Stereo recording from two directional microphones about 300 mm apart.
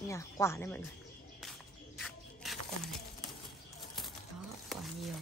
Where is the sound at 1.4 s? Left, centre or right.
Centre.